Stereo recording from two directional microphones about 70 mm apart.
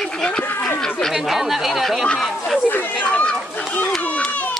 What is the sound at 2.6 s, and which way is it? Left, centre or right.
Speech, left.